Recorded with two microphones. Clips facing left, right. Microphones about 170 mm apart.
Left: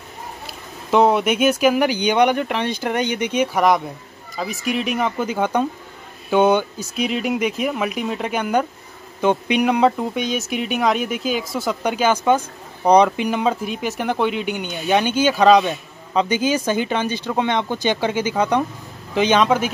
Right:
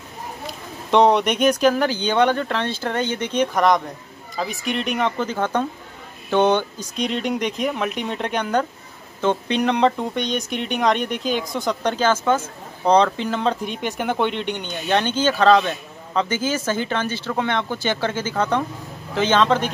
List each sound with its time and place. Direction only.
0.8 s speech: 5° left (ahead or behind)